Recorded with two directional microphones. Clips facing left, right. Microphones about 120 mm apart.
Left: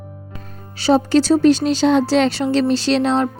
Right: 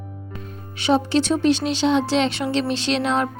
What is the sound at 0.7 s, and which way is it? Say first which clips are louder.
Speech: left 4 dB; 35° left (ahead or behind).